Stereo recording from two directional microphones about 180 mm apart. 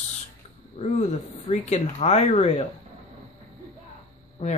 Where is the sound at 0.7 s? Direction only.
35° left (ahead or behind).